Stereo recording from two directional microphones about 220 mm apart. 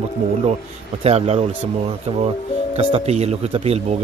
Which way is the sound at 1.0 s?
30° right (ahead or behind).